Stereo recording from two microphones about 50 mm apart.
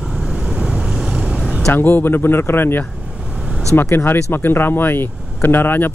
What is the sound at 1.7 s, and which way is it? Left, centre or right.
Speech, left.